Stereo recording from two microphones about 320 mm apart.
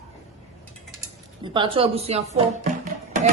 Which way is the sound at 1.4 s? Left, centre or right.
Centre.